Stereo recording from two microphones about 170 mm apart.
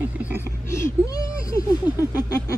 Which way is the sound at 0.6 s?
15° left (ahead or behind).